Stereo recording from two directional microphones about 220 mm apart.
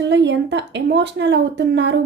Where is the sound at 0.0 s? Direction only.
55° right (ahead or behind).